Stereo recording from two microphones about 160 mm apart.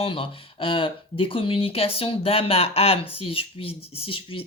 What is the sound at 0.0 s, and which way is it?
Speech, 35° left (ahead or behind).